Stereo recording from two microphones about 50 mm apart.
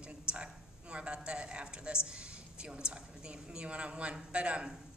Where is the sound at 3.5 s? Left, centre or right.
Right.